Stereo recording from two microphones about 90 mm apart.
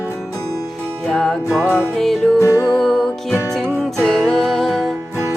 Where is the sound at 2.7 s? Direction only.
Centre (ahead or behind).